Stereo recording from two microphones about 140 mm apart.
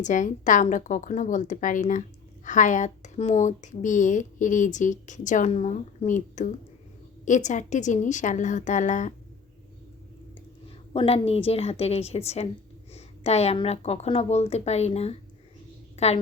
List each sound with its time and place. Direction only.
0.0 s a woman's voice: 65° left (ahead or behind)
5.5 s a woman's voice: 50° left (ahead or behind)
10.9 s speech: 45° left (ahead or behind)